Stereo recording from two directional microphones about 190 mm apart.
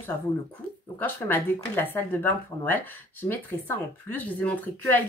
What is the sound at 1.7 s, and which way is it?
A woman's voice, 10° left (ahead or behind).